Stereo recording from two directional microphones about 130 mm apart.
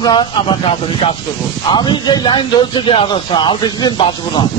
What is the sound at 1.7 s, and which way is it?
Speech, 35° left (ahead or behind).